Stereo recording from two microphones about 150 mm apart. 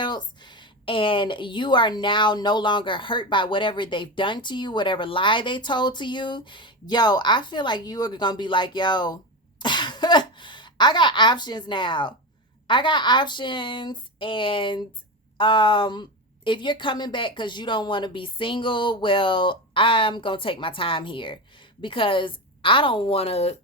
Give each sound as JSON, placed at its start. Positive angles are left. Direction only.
{"t": 0.0, "sound": "a woman's voice", "side_deg": 30}